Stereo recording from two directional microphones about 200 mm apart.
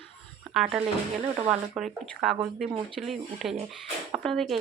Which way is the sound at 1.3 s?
30° right (ahead or behind).